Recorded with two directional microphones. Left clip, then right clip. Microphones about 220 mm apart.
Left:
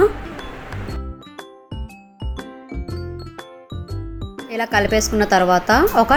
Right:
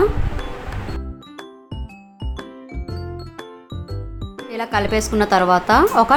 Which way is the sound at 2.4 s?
Centre (ahead or behind).